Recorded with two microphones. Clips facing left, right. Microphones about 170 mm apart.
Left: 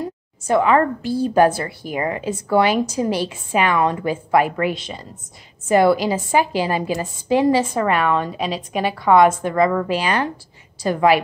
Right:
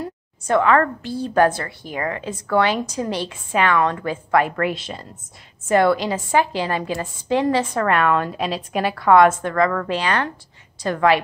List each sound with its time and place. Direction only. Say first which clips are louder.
0.5 s a woman's voice: left 1 dB; 15° left (ahead or behind)